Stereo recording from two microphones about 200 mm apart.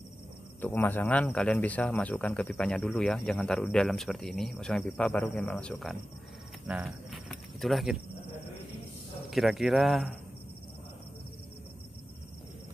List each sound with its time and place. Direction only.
0.6 s speech: 10° left (ahead or behind)
9.3 s speech: centre (ahead or behind)